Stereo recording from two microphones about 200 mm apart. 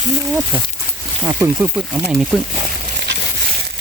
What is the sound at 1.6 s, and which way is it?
Speech, 5° right (ahead or behind).